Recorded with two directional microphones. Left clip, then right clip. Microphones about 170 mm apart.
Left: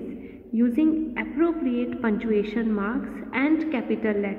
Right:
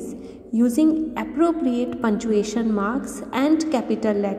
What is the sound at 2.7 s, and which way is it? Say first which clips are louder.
A woman's voice: right 4 dB; 20° right (ahead or behind).